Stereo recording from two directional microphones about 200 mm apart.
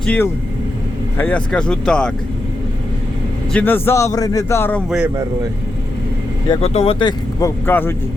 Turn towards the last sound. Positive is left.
turn(degrees=10)  # may be behind; listen again after turning